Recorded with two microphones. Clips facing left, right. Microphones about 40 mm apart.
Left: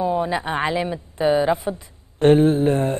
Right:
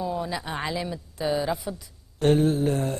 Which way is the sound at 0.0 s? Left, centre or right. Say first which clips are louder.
Left 8 dB; left.